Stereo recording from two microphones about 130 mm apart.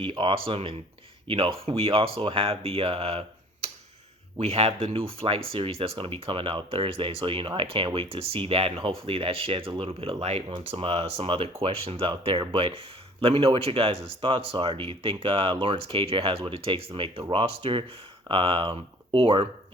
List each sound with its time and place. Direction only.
0.0 s speech: 40° right (ahead or behind)